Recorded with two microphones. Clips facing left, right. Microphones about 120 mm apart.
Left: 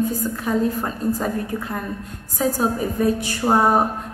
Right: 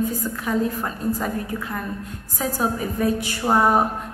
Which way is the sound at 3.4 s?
25° left (ahead or behind).